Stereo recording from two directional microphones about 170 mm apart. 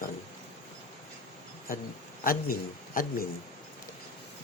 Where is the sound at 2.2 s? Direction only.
55° left (ahead or behind).